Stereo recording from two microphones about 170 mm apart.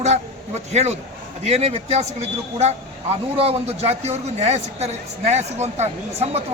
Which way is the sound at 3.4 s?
35° right (ahead or behind).